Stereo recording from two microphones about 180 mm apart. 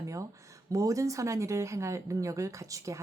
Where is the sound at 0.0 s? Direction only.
15° right (ahead or behind).